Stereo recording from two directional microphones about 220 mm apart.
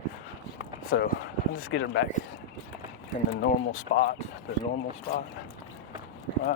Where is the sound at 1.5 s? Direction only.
70° left (ahead or behind).